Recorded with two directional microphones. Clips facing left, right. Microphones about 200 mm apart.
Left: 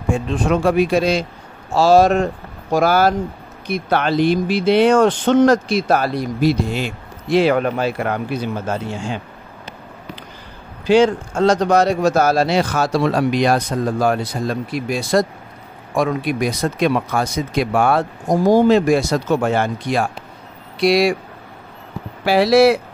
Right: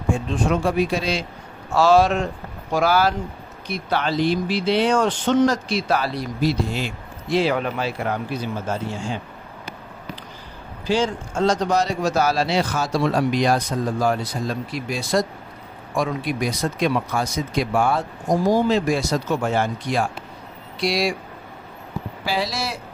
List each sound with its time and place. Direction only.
0.5 s speech: 70° left (ahead or behind)
1.7 s speech: 35° left (ahead or behind); by 8.7 s 65° left (ahead or behind)
10.9 s speech: 65° left (ahead or behind)
22.2 s speech: 65° left (ahead or behind)